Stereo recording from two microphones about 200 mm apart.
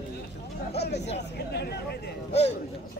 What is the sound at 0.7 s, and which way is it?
Speech, 55° left (ahead or behind).